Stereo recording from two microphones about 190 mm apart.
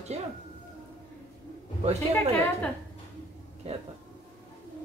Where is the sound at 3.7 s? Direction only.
35° right (ahead or behind).